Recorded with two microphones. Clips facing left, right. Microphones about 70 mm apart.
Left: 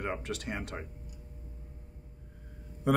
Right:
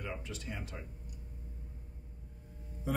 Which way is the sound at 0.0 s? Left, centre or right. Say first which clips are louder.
Left 7 dB; left.